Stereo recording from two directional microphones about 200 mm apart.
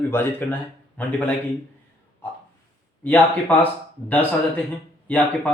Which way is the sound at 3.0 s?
10° left (ahead or behind).